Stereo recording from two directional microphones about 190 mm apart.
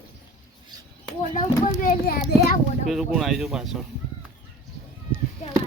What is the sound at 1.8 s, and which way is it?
Speech, 50° left (ahead or behind).